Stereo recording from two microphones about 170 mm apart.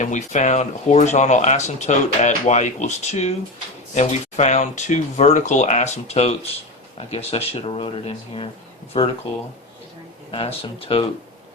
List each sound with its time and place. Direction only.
0.0 s speech: 45° left (ahead or behind); by 9.1 s 30° left (ahead or behind)
10.3 s speech: 35° left (ahead or behind)